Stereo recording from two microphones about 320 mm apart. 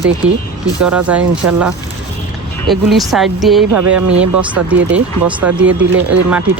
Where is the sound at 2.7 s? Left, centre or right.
Centre.